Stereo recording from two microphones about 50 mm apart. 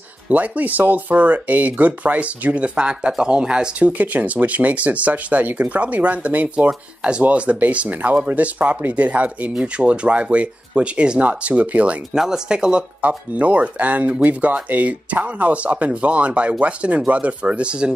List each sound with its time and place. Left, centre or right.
0.3 s speech: right
4.0 s speech: right
7.0 s speech: right
12.1 s speech: centre
13.0 s speech: right